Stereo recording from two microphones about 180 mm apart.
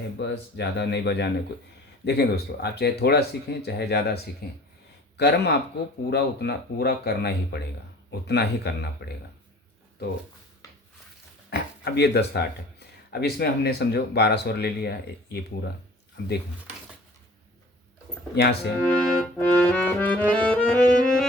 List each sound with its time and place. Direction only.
0.2 s speech: 75° left (ahead or behind)
11.5 s speech: 70° left (ahead or behind)
18.3 s speech: 60° left (ahead or behind)
19.4 s accordion: 10° left (ahead or behind)